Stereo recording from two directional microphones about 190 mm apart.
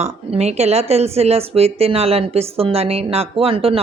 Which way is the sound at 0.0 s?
35° right (ahead or behind).